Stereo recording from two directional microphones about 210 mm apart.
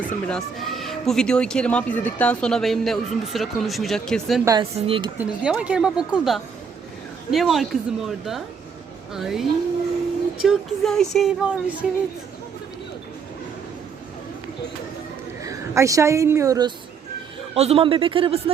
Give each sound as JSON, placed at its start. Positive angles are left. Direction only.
{"t": 0.1, "sound": "speech", "side_deg": 5}
{"t": 4.4, "sound": "speech", "side_deg": -15}
{"t": 5.1, "sound": "speech", "side_deg": -5}
{"t": 15.4, "sound": "a woman's voice", "side_deg": -15}
{"t": 17.5, "sound": "speech", "side_deg": -30}